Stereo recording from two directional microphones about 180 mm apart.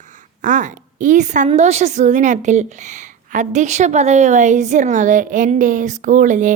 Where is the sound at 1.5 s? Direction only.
40° right (ahead or behind).